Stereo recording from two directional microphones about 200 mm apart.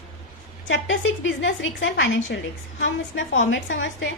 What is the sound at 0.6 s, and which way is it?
A woman's voice, 70° left (ahead or behind).